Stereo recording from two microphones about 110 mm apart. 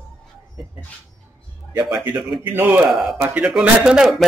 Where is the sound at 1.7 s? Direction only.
15° right (ahead or behind).